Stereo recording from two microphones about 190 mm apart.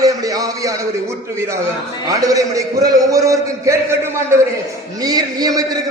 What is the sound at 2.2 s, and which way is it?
A man's voice, 20° right (ahead or behind).